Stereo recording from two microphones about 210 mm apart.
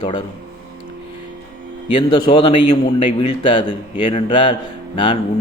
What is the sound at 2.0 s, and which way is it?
A man's voice, 20° left (ahead or behind).